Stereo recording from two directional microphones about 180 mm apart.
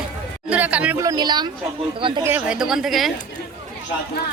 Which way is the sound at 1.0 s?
20° right (ahead or behind).